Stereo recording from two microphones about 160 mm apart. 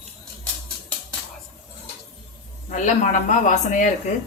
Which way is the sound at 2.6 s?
50° left (ahead or behind).